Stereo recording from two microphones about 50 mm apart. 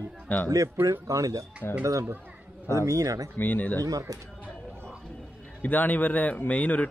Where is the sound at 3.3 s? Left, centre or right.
Left.